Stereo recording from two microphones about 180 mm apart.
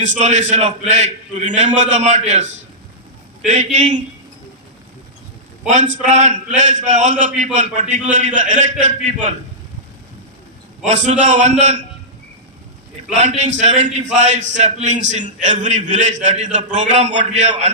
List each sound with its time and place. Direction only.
0.0 s a man's voice: 40° right (ahead or behind)
5.6 s a man's voice: 45° right (ahead or behind)
10.8 s a man's voice: 40° right (ahead or behind)
13.1 s a man's voice: 40° right (ahead or behind)